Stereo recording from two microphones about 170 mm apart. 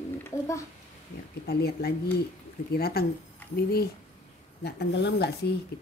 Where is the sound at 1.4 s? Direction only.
65° left (ahead or behind).